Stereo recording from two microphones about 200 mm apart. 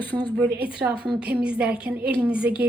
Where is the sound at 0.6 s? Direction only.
5° right (ahead or behind).